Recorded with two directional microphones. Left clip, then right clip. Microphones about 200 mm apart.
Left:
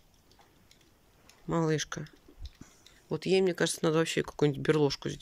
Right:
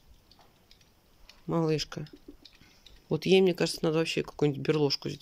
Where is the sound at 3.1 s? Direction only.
15° right (ahead or behind).